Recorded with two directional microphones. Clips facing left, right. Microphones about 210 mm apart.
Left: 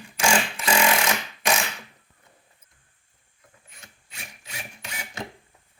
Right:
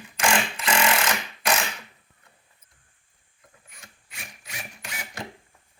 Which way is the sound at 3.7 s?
25° left (ahead or behind).